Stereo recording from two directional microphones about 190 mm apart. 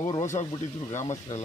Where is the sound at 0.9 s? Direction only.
35° left (ahead or behind).